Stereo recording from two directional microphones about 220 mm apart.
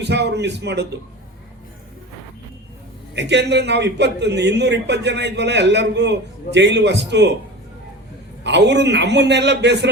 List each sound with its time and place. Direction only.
0.0 s a man's voice: 50° right (ahead or behind)
3.2 s a man's voice: 50° right (ahead or behind)
8.4 s a man's voice: 50° right (ahead or behind)